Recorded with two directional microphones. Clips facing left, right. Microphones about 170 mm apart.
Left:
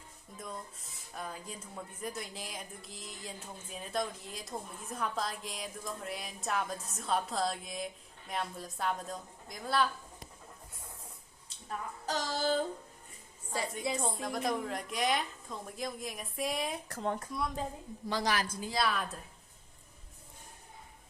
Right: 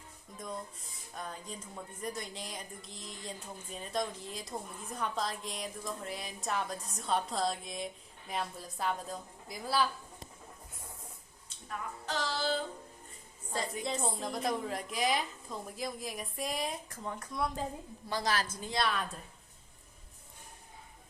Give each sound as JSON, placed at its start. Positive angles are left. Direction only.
{"t": 0.3, "sound": "speech", "side_deg": 0}
{"t": 12.0, "sound": "child singing", "side_deg": 45}
{"t": 13.5, "sound": "a woman's voice", "side_deg": 5}
{"t": 16.9, "sound": "speech", "side_deg": 70}
{"t": 18.2, "sound": "a woman's voice", "side_deg": 15}
{"t": 18.7, "sound": "speech", "side_deg": 0}